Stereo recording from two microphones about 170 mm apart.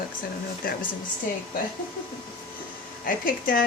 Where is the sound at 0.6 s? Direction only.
55° left (ahead or behind).